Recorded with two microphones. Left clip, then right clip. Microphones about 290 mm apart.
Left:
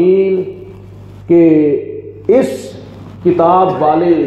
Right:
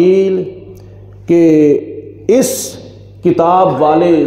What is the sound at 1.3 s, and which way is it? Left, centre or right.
Speech, right.